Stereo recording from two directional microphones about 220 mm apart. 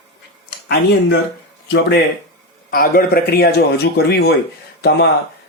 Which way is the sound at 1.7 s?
50° left (ahead or behind).